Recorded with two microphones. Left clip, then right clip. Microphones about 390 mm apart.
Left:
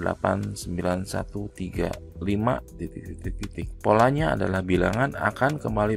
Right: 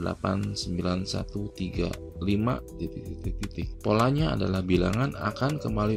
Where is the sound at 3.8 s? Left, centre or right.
Centre.